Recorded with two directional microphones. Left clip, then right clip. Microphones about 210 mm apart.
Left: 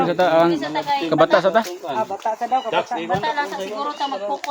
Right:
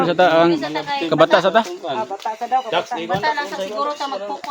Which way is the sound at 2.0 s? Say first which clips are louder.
Left 4 dB; 30° left (ahead or behind).